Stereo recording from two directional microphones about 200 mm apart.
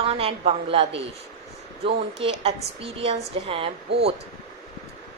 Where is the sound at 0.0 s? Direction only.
30° right (ahead or behind).